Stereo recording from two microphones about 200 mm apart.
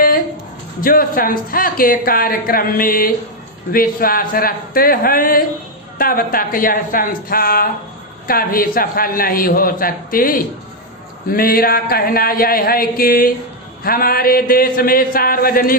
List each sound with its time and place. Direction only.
0.8 s a woman's voice: 45° left (ahead or behind)